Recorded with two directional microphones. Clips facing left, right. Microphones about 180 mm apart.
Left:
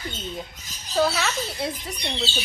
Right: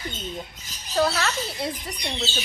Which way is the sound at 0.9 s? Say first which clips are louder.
Even; centre (ahead or behind).